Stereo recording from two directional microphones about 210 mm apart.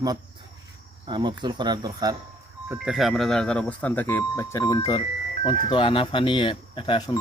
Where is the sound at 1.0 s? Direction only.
20° right (ahead or behind).